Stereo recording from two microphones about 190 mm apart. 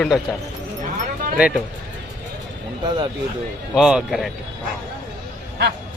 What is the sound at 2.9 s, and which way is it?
Speech, 25° right (ahead or behind).